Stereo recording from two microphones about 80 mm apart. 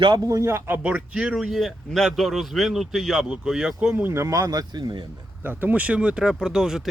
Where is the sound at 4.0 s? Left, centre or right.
Right.